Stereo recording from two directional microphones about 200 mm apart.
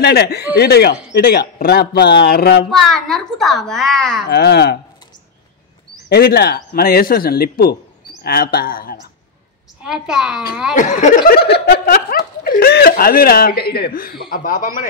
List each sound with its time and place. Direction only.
0.0 s speech: 55° left (ahead or behind)
2.7 s a child's voice: centre (ahead or behind)
4.3 s speech: 55° left (ahead or behind)
6.0 s speech: 50° left (ahead or behind)
9.8 s a child's voice: 5° right (ahead or behind)
10.7 s speech: 40° left (ahead or behind)